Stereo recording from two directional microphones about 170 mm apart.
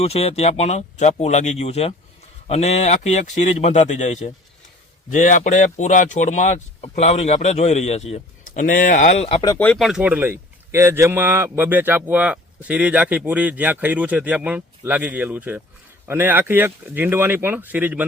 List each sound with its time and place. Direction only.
0.0 s speech: 35° left (ahead or behind)
9.6 s speech: 10° left (ahead or behind)
9.8 s speech: 5° right (ahead or behind)